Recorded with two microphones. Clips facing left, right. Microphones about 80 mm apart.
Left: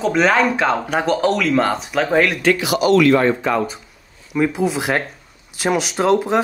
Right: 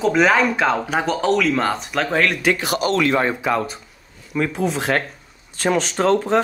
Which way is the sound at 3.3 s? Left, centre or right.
Centre.